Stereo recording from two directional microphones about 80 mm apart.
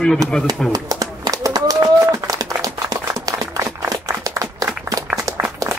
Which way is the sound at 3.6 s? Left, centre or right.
Right.